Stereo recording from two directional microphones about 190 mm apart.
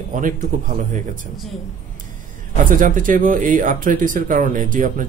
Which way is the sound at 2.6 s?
45° right (ahead or behind).